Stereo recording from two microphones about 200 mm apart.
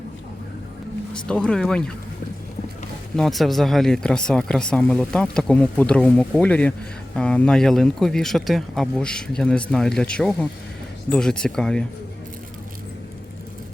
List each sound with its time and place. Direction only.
1.1 s speech: 5° left (ahead or behind)
3.2 s speech: centre (ahead or behind)